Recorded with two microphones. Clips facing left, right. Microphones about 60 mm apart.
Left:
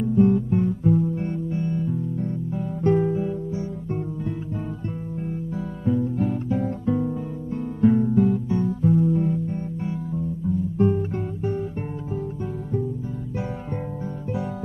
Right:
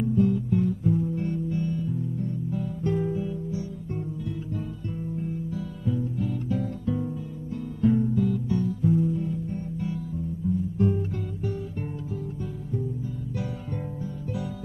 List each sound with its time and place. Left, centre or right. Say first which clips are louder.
0.1 s guitar: left 6 dB; left
1.1 s music: left 1 dB; left
3.0 s guitar: left 5 dB; left
5.2 s music: left 2 dB; left
9.1 s music: left 7 dB; left
9.5 s music: left 3 dB; left
10.8 s guitar: left 7 dB; left